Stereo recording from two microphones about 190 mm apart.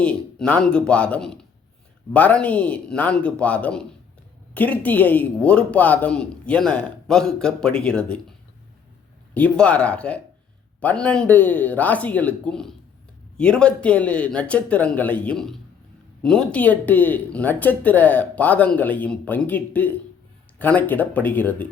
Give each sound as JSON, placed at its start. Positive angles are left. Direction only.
{"t": 0.0, "sound": "speech", "side_deg": 5}
{"t": 9.3, "sound": "speech", "side_deg": 5}